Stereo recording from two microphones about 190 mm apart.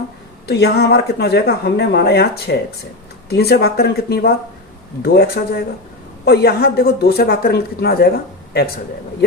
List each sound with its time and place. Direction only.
0.4 s speech: 60° left (ahead or behind)